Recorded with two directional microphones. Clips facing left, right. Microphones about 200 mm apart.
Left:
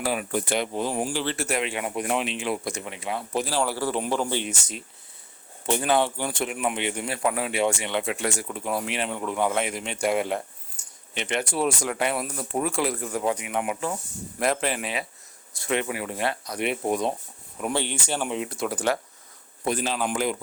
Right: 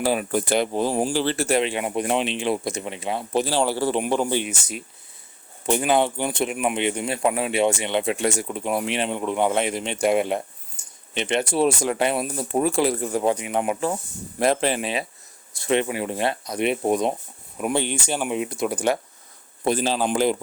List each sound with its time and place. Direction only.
0.0 s speech: 35° right (ahead or behind)
10.8 s a sound: 25° right (ahead or behind)
11.1 s speech: 25° right (ahead or behind)
19.6 s a man's voice: 30° right (ahead or behind)